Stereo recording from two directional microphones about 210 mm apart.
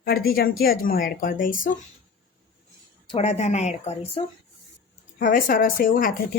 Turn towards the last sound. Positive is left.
turn(degrees=45)  # may be behind; listen again after turning